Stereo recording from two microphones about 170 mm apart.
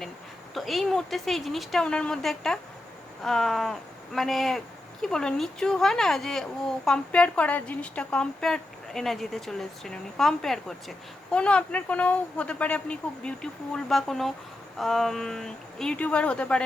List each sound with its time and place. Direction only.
0.5 s speech: centre (ahead or behind)